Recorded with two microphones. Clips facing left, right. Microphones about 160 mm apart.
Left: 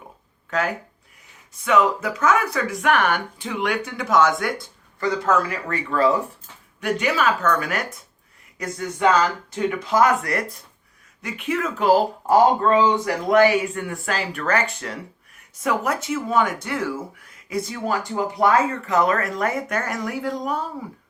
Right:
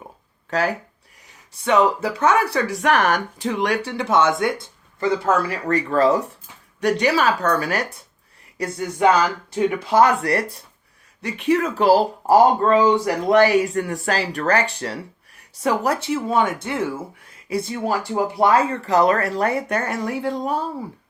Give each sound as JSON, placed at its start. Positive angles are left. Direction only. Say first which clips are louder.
{"t": 0.5, "sound": "speech", "louder": "right 2 dB", "side_deg": -35}
{"t": 9.0, "sound": "speech", "louder": "right 2 dB", "side_deg": -15}
{"t": 9.9, "sound": "speech", "louder": "right 2 dB", "side_deg": -30}